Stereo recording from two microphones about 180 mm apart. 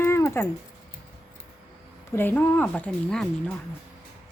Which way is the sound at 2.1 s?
10° left (ahead or behind).